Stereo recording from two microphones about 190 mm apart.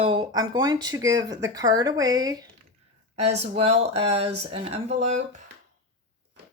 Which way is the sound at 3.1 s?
35° right (ahead or behind).